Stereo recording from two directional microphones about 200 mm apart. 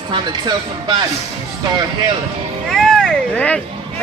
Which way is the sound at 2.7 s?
Centre (ahead or behind).